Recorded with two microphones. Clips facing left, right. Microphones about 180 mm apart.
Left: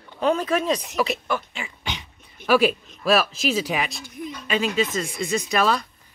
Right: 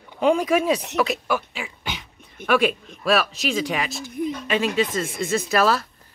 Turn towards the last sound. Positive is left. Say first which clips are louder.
# right 2 dB
turn(degrees=-5)  # may be behind; listen again after turning